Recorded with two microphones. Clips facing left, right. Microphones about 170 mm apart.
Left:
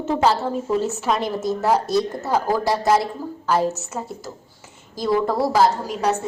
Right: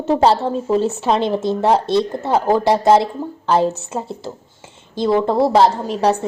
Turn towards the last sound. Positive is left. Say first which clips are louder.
# right 4 dB
turn(degrees=-30)  # may be behind; listen again after turning